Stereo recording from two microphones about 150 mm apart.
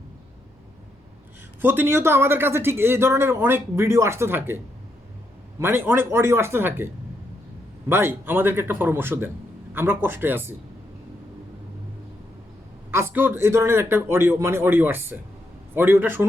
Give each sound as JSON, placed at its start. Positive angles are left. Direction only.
{"t": 1.6, "sound": "speech", "side_deg": -15}
{"t": 7.9, "sound": "speech", "side_deg": -15}
{"t": 12.9, "sound": "speech", "side_deg": -15}